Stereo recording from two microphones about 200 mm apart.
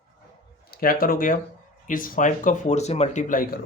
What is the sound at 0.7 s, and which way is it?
Speech, 45° left (ahead or behind).